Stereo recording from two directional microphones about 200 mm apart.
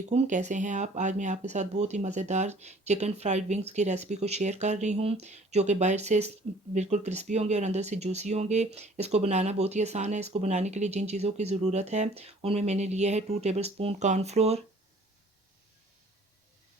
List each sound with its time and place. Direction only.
0.1 s speech: 35° right (ahead or behind)